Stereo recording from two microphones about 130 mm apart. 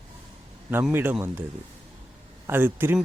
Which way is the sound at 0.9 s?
15° right (ahead or behind).